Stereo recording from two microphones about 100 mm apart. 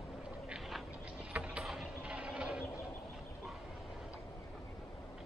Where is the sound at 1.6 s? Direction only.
5° right (ahead or behind).